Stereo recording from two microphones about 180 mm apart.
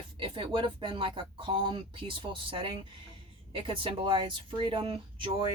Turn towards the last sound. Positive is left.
turn(degrees=-30)  # may be behind; listen again after turning